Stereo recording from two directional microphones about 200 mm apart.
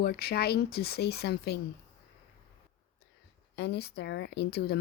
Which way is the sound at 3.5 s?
55° left (ahead or behind).